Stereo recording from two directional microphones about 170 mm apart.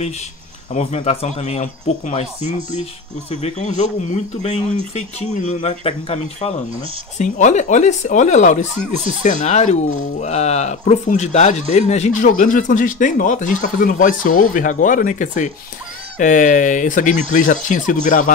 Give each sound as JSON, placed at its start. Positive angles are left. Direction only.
{"t": 0.7, "sound": "speech", "side_deg": 35}